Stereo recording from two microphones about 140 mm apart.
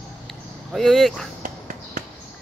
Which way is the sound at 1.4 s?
75° right (ahead or behind).